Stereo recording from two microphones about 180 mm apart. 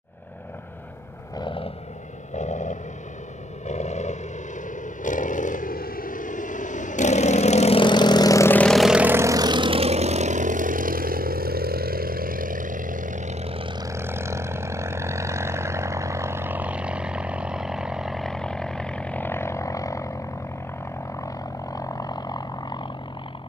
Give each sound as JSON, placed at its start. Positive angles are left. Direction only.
{"t": 1.4, "sound": "vehicle", "side_deg": 30}
{"t": 2.3, "sound": "vehicle", "side_deg": 40}
{"t": 21.7, "sound": "vehicle", "side_deg": 20}